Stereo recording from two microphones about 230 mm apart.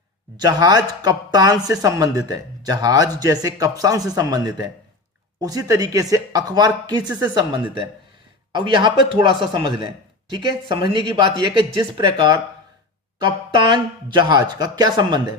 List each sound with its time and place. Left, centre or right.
0.3 s speech: centre